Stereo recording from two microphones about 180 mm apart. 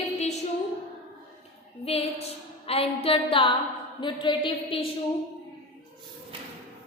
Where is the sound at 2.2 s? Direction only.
35° left (ahead or behind).